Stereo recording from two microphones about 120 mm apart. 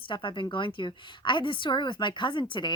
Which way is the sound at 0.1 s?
45° left (ahead or behind).